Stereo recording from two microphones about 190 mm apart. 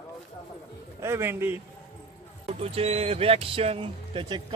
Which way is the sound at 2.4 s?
30° right (ahead or behind).